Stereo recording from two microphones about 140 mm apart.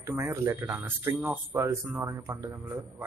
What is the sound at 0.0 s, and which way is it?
A man's voice, 20° right (ahead or behind).